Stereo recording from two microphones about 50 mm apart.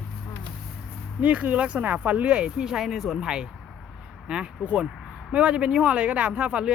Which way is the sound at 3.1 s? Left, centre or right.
Centre.